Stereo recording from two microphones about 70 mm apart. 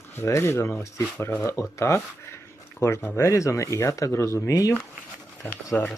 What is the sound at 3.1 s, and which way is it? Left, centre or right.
Speech, left.